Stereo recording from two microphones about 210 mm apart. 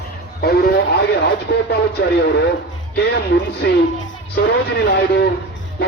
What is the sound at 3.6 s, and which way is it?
Speech, 50° left (ahead or behind).